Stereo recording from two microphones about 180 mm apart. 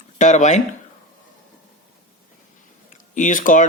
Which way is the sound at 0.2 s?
40° left (ahead or behind).